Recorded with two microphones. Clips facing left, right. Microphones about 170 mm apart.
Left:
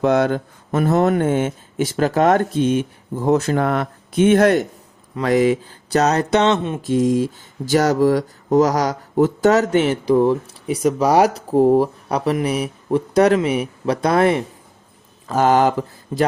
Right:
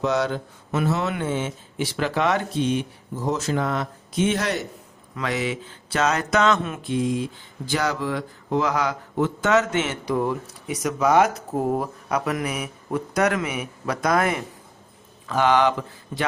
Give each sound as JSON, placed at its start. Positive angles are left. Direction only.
{"t": 0.0, "sound": "speech", "side_deg": 55}
{"t": 5.1, "sound": "speech", "side_deg": 40}
{"t": 6.8, "sound": "speech", "side_deg": 40}
{"t": 15.3, "sound": "speech", "side_deg": 40}